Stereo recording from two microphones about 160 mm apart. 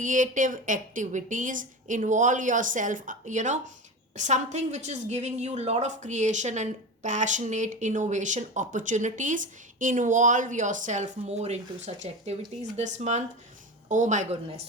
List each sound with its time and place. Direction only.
0.0 s a woman's voice: 50° right (ahead or behind)